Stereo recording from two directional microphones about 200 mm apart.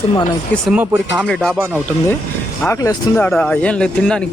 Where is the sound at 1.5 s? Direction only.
10° right (ahead or behind).